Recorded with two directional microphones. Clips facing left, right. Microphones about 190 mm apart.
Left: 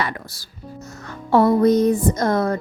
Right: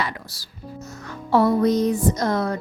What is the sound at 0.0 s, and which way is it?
Speech, 55° left (ahead or behind).